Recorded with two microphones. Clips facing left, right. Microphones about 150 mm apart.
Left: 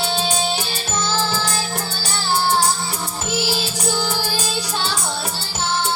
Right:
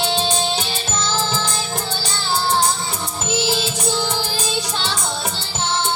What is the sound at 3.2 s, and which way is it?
Music, 20° right (ahead or behind).